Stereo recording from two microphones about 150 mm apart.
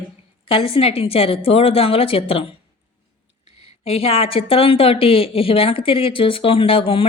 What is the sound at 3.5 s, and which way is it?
Speech, 40° left (ahead or behind).